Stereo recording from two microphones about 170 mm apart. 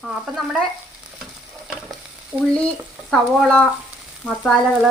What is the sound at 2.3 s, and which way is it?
Speech, 10° right (ahead or behind).